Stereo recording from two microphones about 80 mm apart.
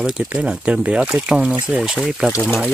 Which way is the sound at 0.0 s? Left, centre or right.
Centre.